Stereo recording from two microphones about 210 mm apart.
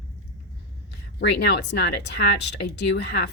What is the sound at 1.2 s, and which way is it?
Speech, 55° left (ahead or behind).